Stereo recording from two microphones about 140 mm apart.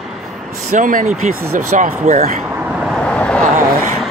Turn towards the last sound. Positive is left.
turn(degrees=10)  # may be behind; listen again after turning